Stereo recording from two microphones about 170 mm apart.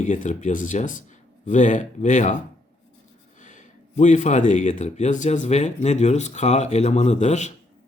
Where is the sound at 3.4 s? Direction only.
45° left (ahead or behind).